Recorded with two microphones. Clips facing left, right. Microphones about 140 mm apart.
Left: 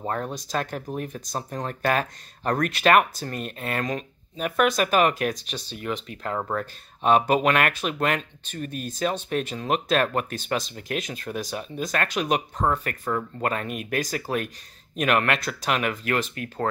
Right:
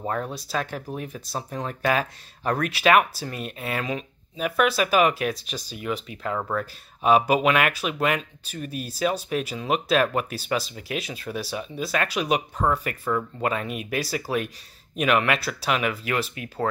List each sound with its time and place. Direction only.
0.0 s speech: 5° right (ahead or behind)
6.3 s speech: 10° left (ahead or behind)
6.6 s speech: 5° right (ahead or behind)